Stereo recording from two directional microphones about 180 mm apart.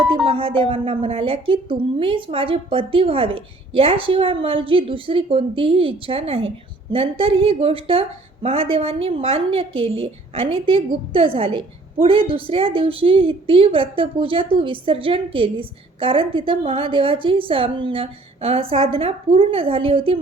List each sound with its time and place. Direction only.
0.3 s a woman's voice: 30° right (ahead or behind)